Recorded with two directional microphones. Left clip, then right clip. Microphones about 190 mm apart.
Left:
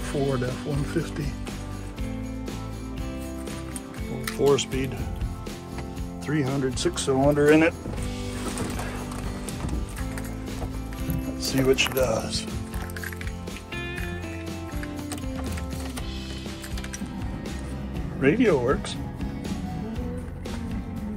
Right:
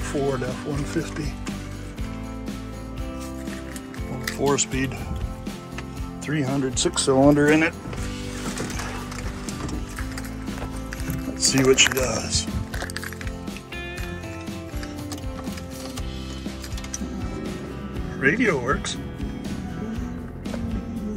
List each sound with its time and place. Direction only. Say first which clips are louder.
0.2 s speech: right 1 dB; centre (ahead or behind)
4.5 s speech: left 1 dB; 10° right (ahead or behind)
6.2 s speech: right 1 dB; 15° right (ahead or behind)
7.4 s speech: left 1 dB; 5° right (ahead or behind)
11.5 s speech: right 4 dB; 10° right (ahead or behind)
18.2 s speech: even; centre (ahead or behind)